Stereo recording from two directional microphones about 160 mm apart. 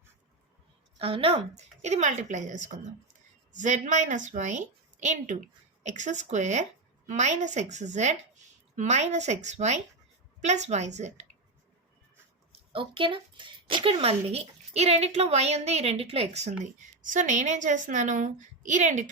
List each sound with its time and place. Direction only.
0.9 s a woman's voice: 35° right (ahead or behind)
12.5 s a woman's voice: 35° right (ahead or behind)